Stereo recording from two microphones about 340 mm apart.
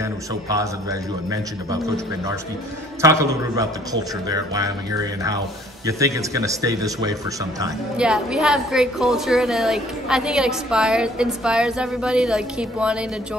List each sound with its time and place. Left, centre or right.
0.0 s a man's voice: centre